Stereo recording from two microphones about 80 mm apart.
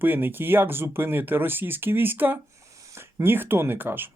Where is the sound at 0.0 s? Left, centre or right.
Right.